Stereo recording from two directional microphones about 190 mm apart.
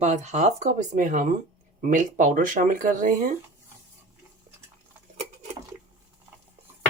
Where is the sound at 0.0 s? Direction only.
40° right (ahead or behind).